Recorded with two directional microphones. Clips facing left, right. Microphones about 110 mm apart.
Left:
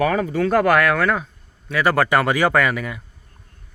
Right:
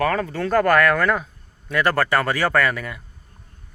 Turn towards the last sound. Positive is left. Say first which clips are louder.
# left 1 dB
turn(degrees=5)  # may be behind; listen again after turning